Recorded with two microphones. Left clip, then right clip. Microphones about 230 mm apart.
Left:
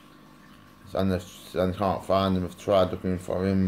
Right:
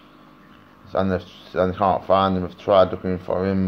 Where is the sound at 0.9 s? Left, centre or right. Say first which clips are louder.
Right 6 dB; centre.